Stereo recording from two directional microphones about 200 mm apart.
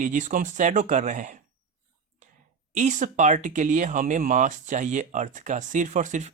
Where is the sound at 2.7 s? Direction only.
40° right (ahead or behind).